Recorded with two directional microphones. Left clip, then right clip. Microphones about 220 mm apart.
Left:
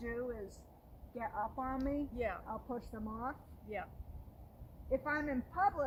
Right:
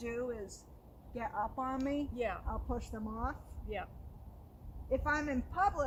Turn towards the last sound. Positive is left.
turn(degrees=-25)  # may be behind; listen again after turning